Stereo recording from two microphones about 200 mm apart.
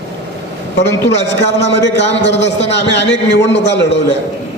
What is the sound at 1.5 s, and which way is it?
Speech, 60° left (ahead or behind).